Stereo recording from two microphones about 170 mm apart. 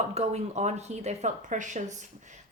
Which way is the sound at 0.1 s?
40° right (ahead or behind).